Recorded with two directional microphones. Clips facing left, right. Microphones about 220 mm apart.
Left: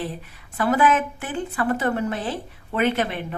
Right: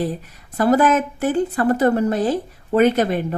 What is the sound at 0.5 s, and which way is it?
A woman's voice, 40° right (ahead or behind).